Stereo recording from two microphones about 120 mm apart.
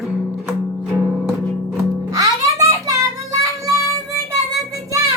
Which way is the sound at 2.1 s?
25° right (ahead or behind).